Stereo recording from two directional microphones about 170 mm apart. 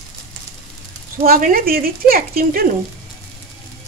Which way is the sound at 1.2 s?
55° right (ahead or behind).